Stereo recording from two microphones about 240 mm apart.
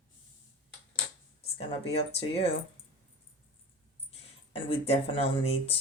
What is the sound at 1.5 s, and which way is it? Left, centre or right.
Speech, left.